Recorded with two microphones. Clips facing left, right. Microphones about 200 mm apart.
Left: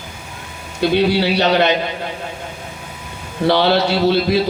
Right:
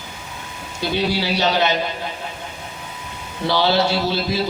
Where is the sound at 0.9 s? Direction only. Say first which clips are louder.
Left 5 dB; 60° left (ahead or behind).